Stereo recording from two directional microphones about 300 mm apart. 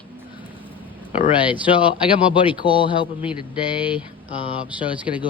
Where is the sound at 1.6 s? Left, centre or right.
Centre.